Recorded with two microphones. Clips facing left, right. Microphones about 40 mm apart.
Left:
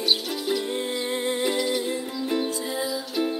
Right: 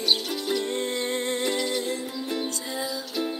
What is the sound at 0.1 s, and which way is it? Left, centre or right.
Music, centre.